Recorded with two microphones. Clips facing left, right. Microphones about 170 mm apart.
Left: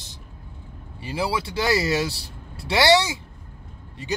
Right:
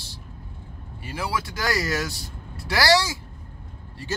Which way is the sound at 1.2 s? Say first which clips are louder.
Left 4 dB; 30° left (ahead or behind).